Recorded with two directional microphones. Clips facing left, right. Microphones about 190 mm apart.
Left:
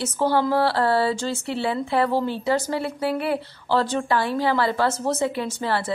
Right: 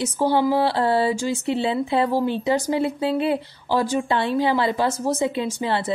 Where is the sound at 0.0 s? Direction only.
15° right (ahead or behind).